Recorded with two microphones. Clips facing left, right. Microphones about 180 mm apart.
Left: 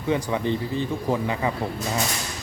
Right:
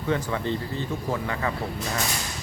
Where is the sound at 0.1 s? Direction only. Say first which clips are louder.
Left 3 dB; 15° left (ahead or behind).